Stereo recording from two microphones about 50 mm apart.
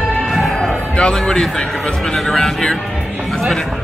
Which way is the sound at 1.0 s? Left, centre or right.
Centre.